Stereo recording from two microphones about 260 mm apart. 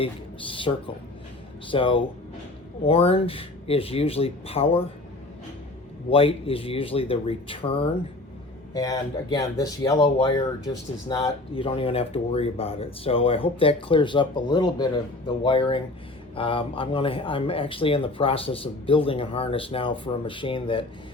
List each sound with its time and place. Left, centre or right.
0.0 s speech: centre
6.1 s speech: left